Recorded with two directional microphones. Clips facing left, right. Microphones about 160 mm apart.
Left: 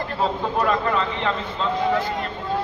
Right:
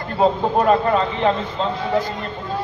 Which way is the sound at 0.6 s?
35° right (ahead or behind).